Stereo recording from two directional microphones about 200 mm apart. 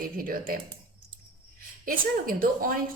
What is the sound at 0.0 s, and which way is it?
Speech, 45° right (ahead or behind).